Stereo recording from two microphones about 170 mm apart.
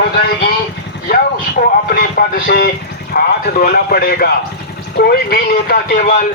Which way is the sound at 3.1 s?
60° left (ahead or behind).